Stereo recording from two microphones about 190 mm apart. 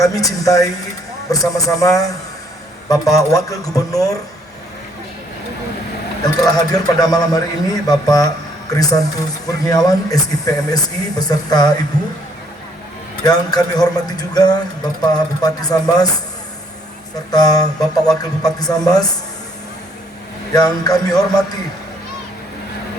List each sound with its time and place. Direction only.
0.0 s speech: 20° left (ahead or behind)
6.2 s speech: 20° left (ahead or behind)
13.2 s speech: 20° left (ahead or behind)
17.3 s speech: 20° left (ahead or behind)
20.5 s speech: 20° left (ahead or behind)